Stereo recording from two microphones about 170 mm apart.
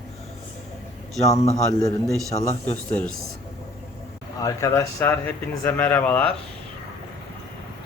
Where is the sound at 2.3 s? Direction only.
30° left (ahead or behind).